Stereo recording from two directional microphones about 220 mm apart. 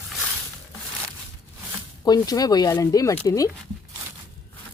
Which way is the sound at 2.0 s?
15° left (ahead or behind).